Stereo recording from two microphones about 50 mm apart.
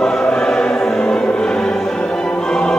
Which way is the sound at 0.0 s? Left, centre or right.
Centre.